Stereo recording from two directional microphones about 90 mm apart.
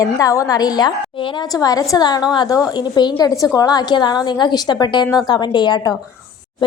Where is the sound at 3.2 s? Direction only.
40° left (ahead or behind).